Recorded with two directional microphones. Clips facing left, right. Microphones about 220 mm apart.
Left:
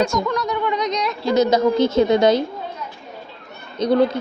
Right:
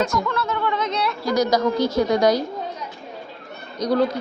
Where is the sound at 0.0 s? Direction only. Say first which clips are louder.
Left 3 dB; 25° left (ahead or behind).